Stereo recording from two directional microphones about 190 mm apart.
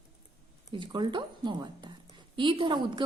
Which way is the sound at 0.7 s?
25° right (ahead or behind).